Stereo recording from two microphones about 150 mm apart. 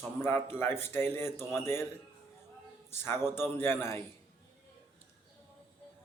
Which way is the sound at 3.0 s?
15° left (ahead or behind).